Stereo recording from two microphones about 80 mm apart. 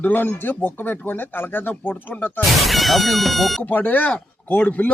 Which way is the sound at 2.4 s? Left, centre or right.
Centre.